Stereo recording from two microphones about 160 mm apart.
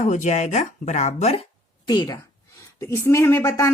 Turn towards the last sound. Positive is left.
turn(degrees=15)  # may be behind; listen again after turning